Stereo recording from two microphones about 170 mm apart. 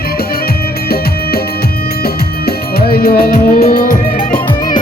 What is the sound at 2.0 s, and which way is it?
Music, 65° left (ahead or behind).